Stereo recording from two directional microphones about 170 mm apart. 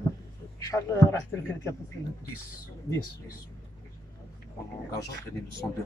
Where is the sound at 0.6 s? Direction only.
20° left (ahead or behind).